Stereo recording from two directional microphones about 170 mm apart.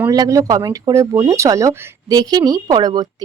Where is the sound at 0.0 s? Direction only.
20° right (ahead or behind).